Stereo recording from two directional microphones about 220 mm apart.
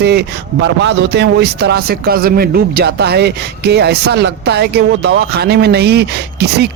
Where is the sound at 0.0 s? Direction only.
50° right (ahead or behind).